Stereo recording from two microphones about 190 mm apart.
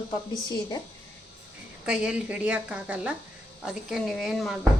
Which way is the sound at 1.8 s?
5° right (ahead or behind).